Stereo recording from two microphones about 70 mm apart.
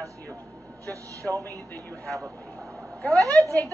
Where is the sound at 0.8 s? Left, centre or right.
Right.